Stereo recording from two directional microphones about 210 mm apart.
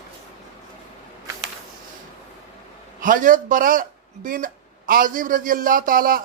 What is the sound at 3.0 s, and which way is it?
A man's voice, 40° right (ahead or behind).